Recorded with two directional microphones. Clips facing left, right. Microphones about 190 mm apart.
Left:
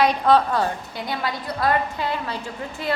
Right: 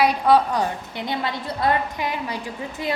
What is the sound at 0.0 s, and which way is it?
A woman's voice, 10° right (ahead or behind).